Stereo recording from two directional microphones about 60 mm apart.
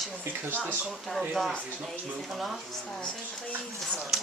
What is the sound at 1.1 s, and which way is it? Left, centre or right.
A woman's voice, centre.